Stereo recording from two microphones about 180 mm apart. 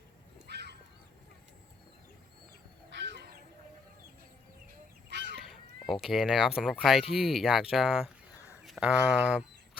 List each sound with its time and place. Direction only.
0.4 s honk: 65° right (ahead or behind)
2.9 s a sound: 75° right (ahead or behind)
5.0 s goose: 75° right (ahead or behind)
5.9 s speech: centre (ahead or behind)